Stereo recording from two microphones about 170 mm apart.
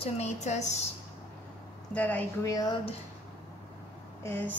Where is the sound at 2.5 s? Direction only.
20° left (ahead or behind).